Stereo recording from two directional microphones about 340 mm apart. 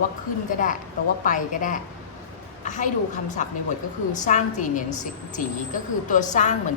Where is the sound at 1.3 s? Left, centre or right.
Left.